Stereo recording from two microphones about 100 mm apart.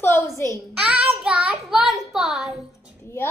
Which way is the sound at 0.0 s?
30° left (ahead or behind).